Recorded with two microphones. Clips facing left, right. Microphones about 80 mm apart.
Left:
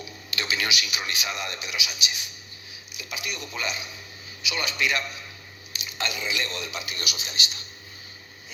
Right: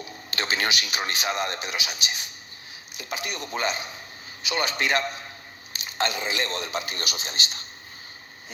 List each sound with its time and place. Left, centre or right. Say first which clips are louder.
0.0 s a man's voice: right 2 dB; right